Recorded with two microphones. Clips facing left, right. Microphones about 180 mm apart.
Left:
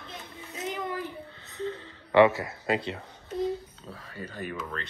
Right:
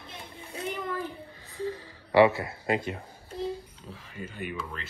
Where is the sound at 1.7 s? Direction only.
25° left (ahead or behind).